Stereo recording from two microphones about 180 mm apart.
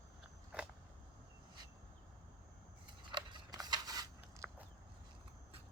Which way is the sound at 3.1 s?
25° right (ahead or behind).